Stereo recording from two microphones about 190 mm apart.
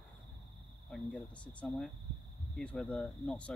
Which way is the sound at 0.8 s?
5° left (ahead or behind).